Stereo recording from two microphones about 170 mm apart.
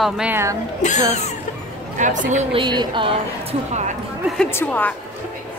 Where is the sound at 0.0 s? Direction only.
5° right (ahead or behind).